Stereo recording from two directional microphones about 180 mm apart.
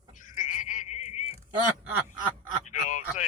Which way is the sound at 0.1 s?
45° left (ahead or behind).